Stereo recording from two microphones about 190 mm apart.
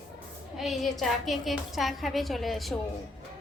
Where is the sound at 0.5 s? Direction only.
Centre (ahead or behind).